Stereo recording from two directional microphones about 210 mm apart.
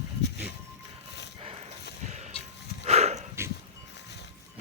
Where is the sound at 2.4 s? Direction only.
30° left (ahead or behind).